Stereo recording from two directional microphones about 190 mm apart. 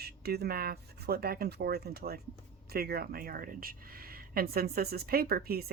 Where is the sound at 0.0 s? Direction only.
55° right (ahead or behind).